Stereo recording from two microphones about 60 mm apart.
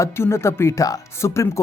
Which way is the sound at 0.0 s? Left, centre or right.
Left.